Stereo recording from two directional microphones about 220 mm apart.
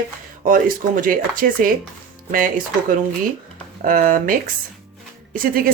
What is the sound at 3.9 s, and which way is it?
Speech, 40° right (ahead or behind).